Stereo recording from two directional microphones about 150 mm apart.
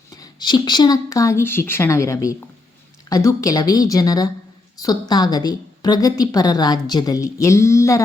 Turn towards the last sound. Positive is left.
turn(degrees=20)  # may be behind; listen again after turning